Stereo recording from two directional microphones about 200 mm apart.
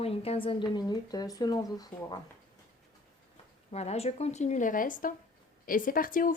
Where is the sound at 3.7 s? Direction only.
30° left (ahead or behind).